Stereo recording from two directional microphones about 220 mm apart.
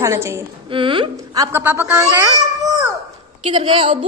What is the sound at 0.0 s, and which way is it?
Speech, 10° right (ahead or behind).